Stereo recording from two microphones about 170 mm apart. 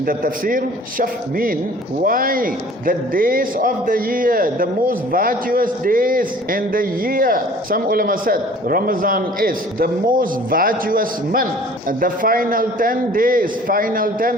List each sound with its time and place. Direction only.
0.0 s a man's voice: 55° right (ahead or behind)